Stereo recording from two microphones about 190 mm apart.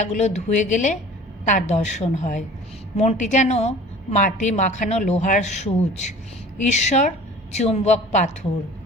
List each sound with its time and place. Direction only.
0.0 s a woman's voice: 35° left (ahead or behind)